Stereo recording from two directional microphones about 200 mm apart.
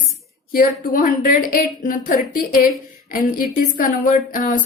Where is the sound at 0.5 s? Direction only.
45° left (ahead or behind).